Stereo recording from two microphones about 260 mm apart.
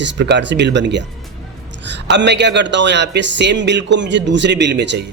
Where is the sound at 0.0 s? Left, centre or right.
Right.